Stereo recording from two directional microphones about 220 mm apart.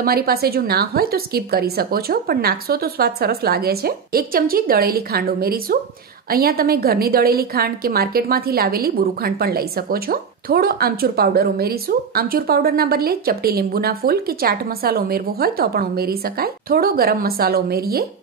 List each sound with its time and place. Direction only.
0.0 s a woman's voice: 45° right (ahead or behind)